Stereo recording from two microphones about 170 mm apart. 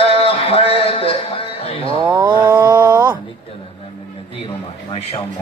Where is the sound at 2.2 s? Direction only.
25° right (ahead or behind).